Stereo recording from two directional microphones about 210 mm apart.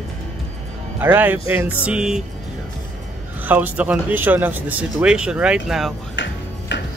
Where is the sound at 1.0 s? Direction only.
10° right (ahead or behind).